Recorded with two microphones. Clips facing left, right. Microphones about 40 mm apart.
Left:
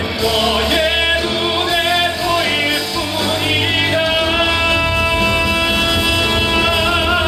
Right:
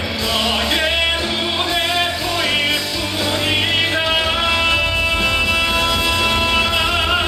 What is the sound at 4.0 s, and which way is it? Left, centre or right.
Music, centre.